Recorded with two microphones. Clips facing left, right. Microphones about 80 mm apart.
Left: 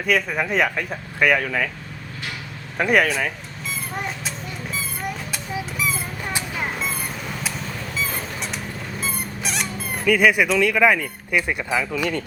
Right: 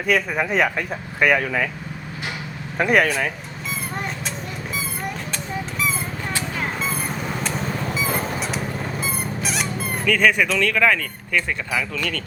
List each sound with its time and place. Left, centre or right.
0.0 s speech: centre
2.7 s speech: centre
5.3 s a sound: centre
6.6 s vehicle: centre
8.4 s a sound: centre
10.1 s speech: centre